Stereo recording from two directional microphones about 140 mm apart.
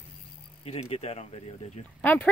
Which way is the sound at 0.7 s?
45° left (ahead or behind).